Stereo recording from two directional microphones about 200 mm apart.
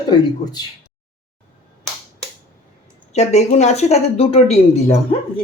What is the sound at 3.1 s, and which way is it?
A woman's voice, 35° left (ahead or behind).